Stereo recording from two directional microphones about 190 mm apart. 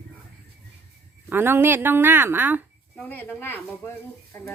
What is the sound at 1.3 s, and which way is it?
Speech, 10° right (ahead or behind).